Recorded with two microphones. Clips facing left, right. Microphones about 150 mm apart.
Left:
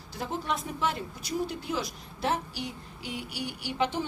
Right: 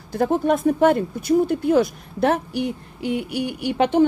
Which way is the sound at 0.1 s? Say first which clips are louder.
Right 13 dB; 55° right (ahead or behind).